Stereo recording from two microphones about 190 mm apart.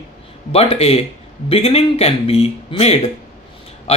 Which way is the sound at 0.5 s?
30° left (ahead or behind).